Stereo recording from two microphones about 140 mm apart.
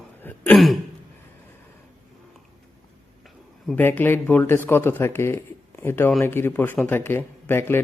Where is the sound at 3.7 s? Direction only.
15° left (ahead or behind).